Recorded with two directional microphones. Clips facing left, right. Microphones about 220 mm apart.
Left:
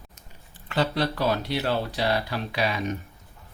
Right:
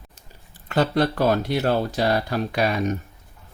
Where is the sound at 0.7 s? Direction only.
50° right (ahead or behind).